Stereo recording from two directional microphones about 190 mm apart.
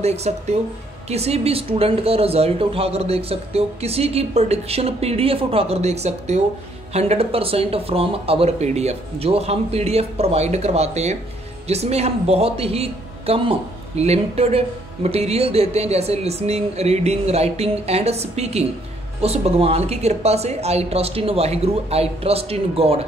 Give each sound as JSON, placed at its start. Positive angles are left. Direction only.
{"t": 0.0, "sound": "speech", "side_deg": -35}